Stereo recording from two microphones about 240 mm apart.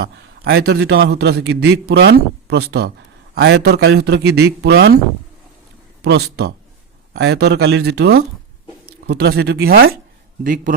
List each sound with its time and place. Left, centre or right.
0.4 s a man's voice: right
6.0 s a man's voice: right